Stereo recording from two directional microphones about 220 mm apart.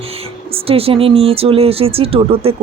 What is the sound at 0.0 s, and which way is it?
Speech, 25° right (ahead or behind).